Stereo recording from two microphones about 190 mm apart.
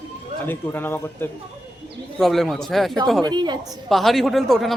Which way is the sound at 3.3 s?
25° right (ahead or behind).